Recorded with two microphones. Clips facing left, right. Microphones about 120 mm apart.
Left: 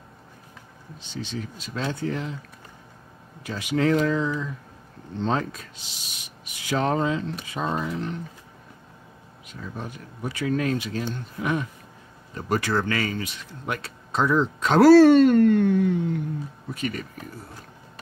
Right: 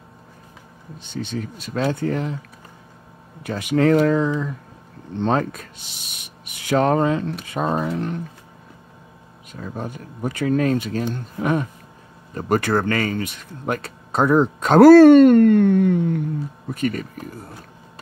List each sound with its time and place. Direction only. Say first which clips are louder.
1.0 s speech: right 5 dB; 55° right (ahead or behind)
3.4 s speech: right 5 dB; 55° right (ahead or behind)
9.6 s speech: right 5 dB; 45° right (ahead or behind)
12.4 s speech: right 5 dB; 50° right (ahead or behind)